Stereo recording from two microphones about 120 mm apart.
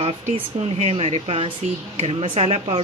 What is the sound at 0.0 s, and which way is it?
Speech, 60° right (ahead or behind).